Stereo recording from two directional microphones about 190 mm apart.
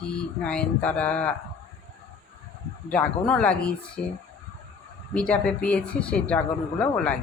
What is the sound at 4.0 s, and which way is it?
Speech, 55° left (ahead or behind).